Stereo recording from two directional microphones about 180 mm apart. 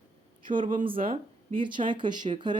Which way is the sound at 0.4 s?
25° right (ahead or behind).